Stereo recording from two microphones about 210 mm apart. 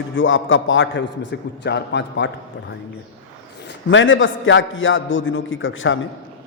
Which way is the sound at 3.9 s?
65° left (ahead or behind).